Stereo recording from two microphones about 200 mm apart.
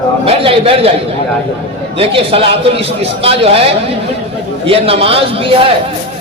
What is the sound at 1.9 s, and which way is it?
A man's voice, 30° right (ahead or behind).